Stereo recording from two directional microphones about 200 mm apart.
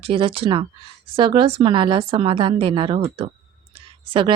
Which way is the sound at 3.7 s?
25° right (ahead or behind).